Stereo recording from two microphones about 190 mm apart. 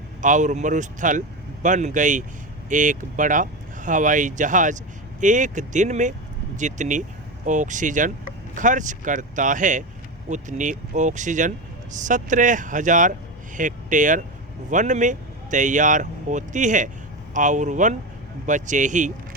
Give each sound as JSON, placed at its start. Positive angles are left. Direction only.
{"t": 0.2, "sound": "speech", "side_deg": -40}